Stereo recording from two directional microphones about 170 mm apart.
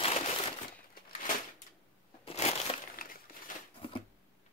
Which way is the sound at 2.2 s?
40° left (ahead or behind).